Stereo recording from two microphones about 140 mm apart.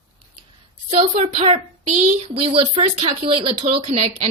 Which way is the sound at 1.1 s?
50° right (ahead or behind).